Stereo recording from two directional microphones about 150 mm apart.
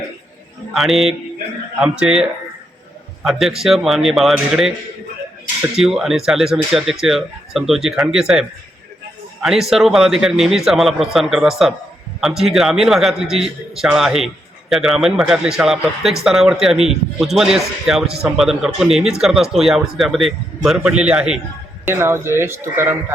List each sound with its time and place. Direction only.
0.7 s a man's voice: centre (ahead or behind)
21.8 s a man's voice: 15° right (ahead or behind)